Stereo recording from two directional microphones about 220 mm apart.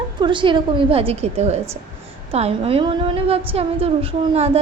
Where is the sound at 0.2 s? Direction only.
20° right (ahead or behind).